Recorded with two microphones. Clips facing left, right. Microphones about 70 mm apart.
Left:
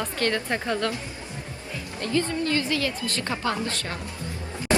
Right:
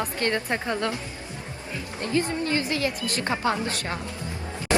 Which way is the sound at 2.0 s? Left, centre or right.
Right.